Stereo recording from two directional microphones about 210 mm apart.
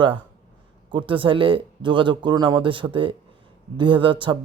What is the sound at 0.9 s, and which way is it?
Speech, 25° right (ahead or behind).